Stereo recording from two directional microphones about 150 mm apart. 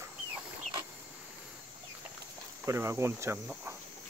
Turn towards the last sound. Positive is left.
turn(degrees=-15)  # may be behind; listen again after turning